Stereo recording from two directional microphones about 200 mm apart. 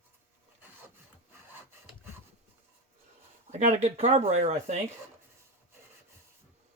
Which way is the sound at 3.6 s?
35° right (ahead or behind).